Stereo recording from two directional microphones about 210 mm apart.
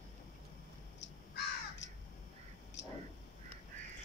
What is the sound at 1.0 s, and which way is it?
Crow, 60° left (ahead or behind).